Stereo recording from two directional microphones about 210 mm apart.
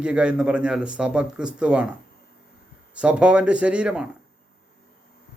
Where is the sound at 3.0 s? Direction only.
5° right (ahead or behind).